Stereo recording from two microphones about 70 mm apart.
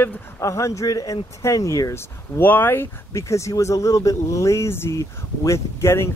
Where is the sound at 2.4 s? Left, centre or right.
Left.